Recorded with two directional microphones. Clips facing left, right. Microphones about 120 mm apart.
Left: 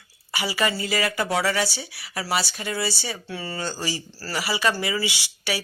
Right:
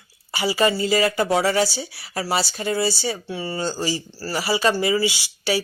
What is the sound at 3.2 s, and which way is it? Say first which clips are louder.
Speech: right 4 dB; 20° right (ahead or behind).